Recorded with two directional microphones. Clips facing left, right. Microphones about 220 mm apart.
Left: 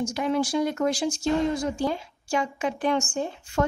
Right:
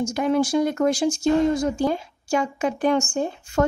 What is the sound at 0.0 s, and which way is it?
Speech, 45° right (ahead or behind).